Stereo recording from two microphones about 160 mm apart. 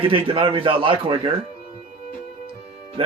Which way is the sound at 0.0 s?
30° right (ahead or behind).